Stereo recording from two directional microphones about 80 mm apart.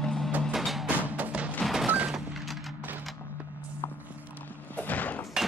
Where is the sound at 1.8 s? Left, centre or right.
Centre.